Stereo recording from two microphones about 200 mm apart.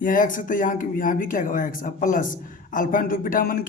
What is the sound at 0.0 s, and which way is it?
A man's voice, 40° left (ahead or behind).